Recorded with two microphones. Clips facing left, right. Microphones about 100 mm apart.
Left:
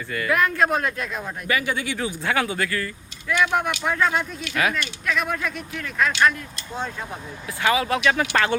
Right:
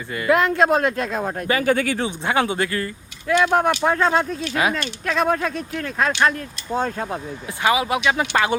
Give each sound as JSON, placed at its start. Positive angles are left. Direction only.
{"t": 0.1, "sound": "speech", "side_deg": -25}
{"t": 1.7, "sound": "speech", "side_deg": -50}
{"t": 2.0, "sound": "speech", "side_deg": -25}
{"t": 7.6, "sound": "speech", "side_deg": -15}